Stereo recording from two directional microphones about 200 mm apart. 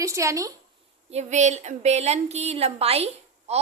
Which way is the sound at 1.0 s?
35° right (ahead or behind).